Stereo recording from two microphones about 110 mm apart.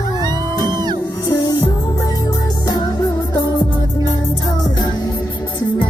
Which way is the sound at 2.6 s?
35° left (ahead or behind).